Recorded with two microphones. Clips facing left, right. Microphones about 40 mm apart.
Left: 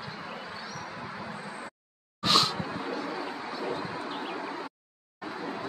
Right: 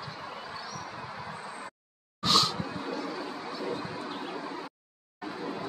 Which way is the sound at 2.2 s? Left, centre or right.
Left.